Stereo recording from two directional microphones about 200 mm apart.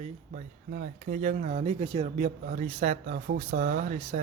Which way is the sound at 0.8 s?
40° right (ahead or behind).